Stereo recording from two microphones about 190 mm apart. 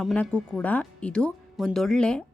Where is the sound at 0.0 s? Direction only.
5° left (ahead or behind).